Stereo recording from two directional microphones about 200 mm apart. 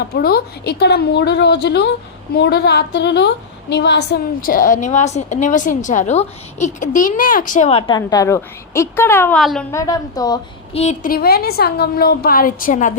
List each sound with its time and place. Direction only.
0.0 s a woman's voice: 50° left (ahead or behind); by 9.4 s 10° left (ahead or behind)
9.4 s a woman's voice: centre (ahead or behind)
9.7 s a woman's voice: 15° left (ahead or behind)
10.8 s a woman's voice: 40° left (ahead or behind)